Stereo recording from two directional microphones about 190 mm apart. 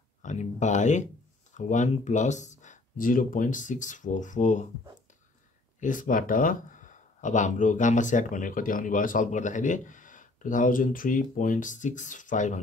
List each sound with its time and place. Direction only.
0.2 s speech: 40° left (ahead or behind)
5.8 s speech: 45° left (ahead or behind)